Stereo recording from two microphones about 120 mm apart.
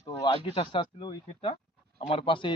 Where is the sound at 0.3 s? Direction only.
45° left (ahead or behind).